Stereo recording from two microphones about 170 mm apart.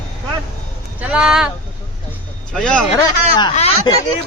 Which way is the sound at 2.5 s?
5° left (ahead or behind).